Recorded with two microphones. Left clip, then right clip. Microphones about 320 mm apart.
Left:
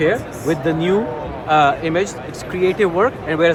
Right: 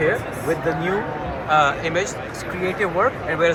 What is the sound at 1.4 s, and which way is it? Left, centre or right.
Speech, left.